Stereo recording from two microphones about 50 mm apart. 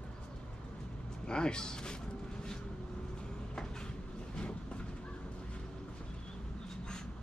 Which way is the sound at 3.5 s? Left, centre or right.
Centre.